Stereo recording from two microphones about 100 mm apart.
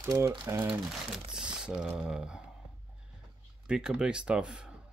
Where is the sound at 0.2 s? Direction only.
25° right (ahead or behind).